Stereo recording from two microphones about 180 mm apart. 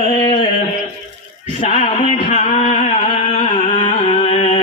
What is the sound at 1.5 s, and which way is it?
Music, 45° left (ahead or behind).